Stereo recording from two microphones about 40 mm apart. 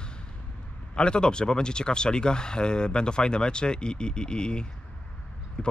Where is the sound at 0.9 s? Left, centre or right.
Left.